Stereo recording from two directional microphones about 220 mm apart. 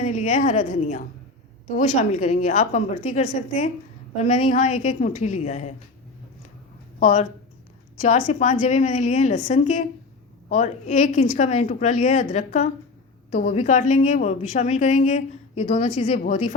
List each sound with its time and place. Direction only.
0.0 s a woman's voice: 35° left (ahead or behind)
7.0 s a woman's voice: 35° left (ahead or behind)